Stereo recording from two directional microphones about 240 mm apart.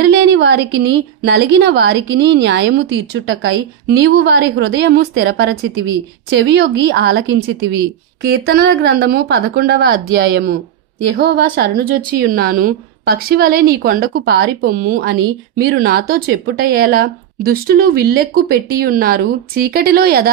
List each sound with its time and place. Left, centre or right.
0.0 s a woman's voice: right